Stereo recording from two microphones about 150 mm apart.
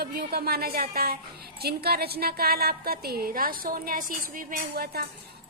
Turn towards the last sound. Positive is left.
turn(degrees=-90)